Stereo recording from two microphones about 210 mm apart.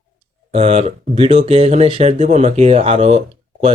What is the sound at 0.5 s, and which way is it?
Speech, 30° right (ahead or behind).